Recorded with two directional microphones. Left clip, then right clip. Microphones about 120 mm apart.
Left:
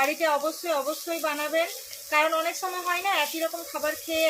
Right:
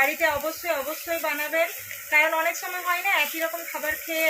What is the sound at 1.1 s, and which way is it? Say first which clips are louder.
Speech: right 2 dB; 25° left (ahead or behind).